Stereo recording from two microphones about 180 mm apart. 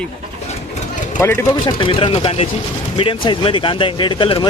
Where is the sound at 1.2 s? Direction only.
15° left (ahead or behind).